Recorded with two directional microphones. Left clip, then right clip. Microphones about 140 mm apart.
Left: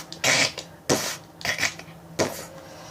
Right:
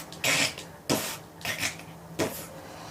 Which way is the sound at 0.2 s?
80° left.